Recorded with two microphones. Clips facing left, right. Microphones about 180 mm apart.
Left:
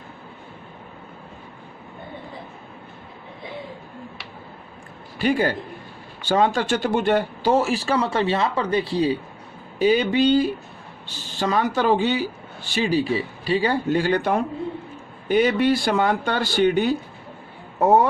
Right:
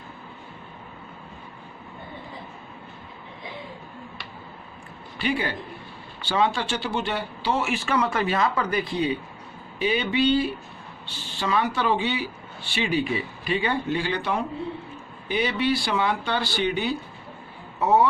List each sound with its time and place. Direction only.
5.2 s speech: 45° left (ahead or behind)